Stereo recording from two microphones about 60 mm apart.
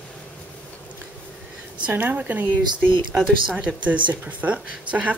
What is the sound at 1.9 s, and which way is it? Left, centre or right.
Speech, right.